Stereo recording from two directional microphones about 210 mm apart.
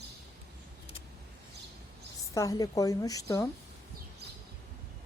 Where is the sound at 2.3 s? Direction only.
15° left (ahead or behind).